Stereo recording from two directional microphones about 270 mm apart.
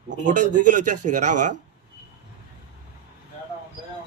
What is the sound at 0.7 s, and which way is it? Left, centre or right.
Speech, right.